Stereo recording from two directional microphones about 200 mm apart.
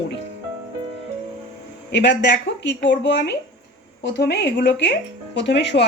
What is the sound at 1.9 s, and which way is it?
Speech, 60° left (ahead or behind).